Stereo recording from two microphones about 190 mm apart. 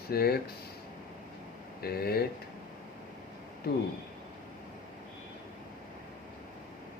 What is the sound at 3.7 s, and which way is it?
Speech, 55° left (ahead or behind).